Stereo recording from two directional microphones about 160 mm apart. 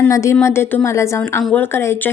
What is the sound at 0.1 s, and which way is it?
A woman's voice, 20° left (ahead or behind).